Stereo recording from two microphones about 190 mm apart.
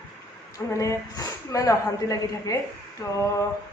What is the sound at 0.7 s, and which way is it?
A woman's voice, 15° left (ahead or behind).